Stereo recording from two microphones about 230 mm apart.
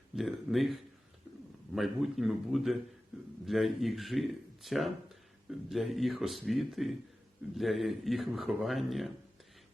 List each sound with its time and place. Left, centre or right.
0.2 s speech: centre